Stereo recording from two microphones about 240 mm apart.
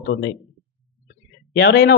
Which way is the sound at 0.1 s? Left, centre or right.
Left.